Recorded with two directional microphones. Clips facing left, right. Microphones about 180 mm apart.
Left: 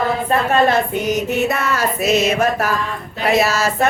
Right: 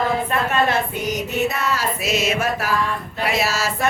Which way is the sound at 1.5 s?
55° left (ahead or behind).